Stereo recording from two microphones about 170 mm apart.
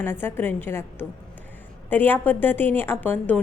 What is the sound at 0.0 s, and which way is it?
A woman's voice, 15° left (ahead or behind).